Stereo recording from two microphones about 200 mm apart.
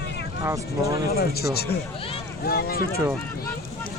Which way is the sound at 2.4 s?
50° left (ahead or behind).